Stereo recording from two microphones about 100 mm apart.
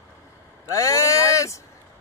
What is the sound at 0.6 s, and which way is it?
Speech, 35° left (ahead or behind).